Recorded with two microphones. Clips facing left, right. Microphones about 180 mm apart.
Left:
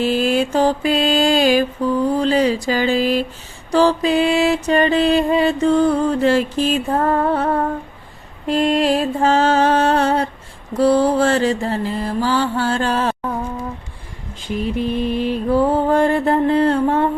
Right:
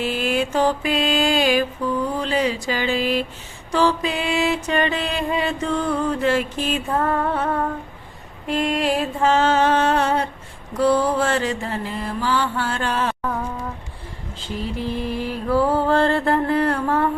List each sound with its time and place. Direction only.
0.0 s music: 35° left (ahead or behind)
14.3 s mantra: 15° left (ahead or behind)